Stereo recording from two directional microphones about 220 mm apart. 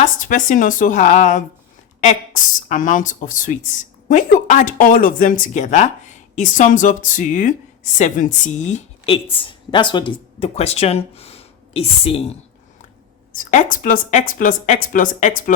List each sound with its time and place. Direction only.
0.2 s a woman's voice: 35° left (ahead or behind)
13.3 s a woman's voice: 35° left (ahead or behind)